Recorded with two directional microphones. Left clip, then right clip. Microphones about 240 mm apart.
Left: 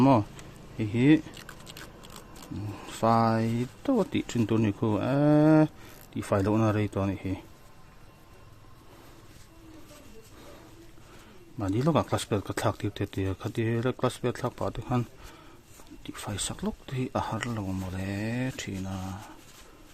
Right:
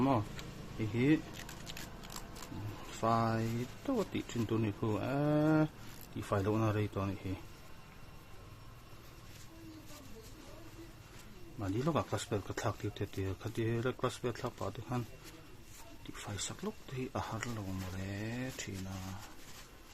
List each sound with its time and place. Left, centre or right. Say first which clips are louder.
0.8 s speech: left 9 dB; left
3.0 s speech: left 9 dB; left
11.6 s speech: left 8 dB; left
16.0 s speech: left 8 dB; left